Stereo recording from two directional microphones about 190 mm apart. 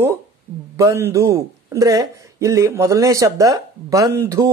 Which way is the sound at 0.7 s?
15° right (ahead or behind).